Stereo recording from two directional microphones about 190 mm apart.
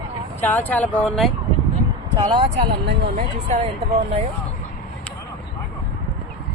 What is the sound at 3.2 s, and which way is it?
Speech, 35° right (ahead or behind).